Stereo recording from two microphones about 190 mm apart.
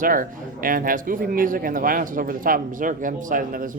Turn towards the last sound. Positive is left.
turn(degrees=-45)  # may be behind; listen again after turning